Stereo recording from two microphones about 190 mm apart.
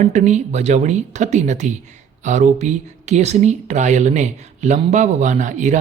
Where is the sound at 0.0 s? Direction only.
35° right (ahead or behind).